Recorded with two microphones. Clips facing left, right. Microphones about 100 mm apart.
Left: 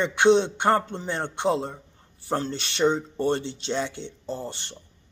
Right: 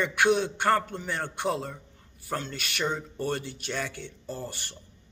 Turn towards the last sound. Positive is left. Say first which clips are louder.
# left 4 dB
turn(degrees=25)  # may be behind; listen again after turning